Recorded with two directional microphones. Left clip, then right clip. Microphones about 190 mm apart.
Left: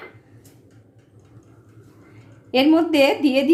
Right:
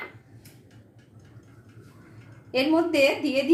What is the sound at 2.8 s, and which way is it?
Speech, 55° left (ahead or behind).